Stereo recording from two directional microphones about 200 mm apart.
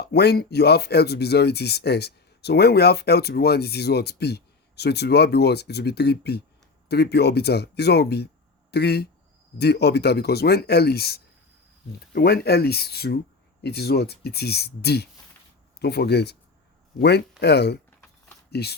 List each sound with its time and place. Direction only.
0.0 s speech: 55° left (ahead or behind)